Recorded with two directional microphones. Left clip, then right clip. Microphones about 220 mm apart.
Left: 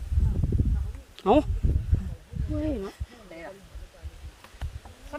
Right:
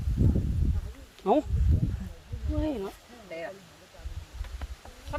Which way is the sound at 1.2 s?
35° left (ahead or behind).